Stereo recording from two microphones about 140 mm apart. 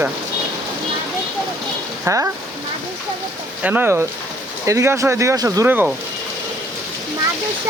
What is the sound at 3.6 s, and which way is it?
Speech, 15° right (ahead or behind).